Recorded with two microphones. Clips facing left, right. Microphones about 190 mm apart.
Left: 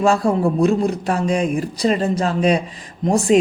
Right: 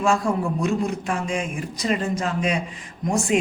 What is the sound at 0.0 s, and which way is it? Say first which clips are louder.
Speech: left 5 dB; 35° left (ahead or behind).